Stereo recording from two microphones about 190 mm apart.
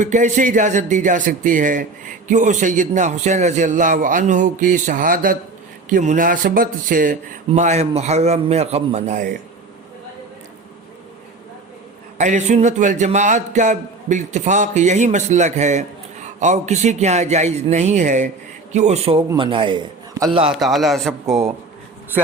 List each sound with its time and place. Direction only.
0.0 s speech: 40° right (ahead or behind)
12.1 s a man's voice: 40° right (ahead or behind)
20.5 s a man's voice: centre (ahead or behind)